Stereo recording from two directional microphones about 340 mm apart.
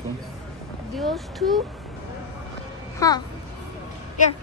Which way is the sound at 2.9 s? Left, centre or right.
Centre.